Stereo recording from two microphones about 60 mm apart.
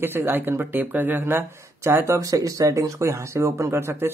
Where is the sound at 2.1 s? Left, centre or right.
Right.